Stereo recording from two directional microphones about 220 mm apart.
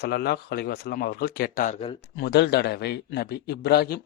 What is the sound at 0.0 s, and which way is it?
A man's voice, 45° left (ahead or behind).